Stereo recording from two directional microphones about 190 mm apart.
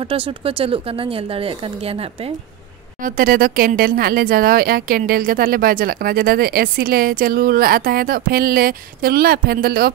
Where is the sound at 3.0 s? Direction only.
45° right (ahead or behind).